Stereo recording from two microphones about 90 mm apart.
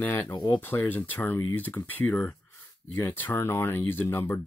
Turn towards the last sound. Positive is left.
turn(degrees=25)  # may be behind; listen again after turning